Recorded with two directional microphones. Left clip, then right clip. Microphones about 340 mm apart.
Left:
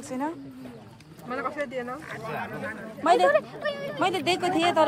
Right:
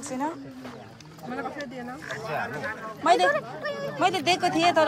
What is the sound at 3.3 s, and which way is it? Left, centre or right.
Speech, left.